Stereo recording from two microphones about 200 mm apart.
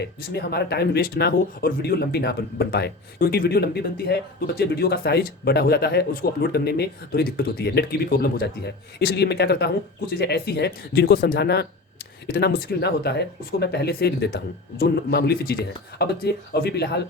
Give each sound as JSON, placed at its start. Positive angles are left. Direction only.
{"t": 0.2, "sound": "speech", "side_deg": 55}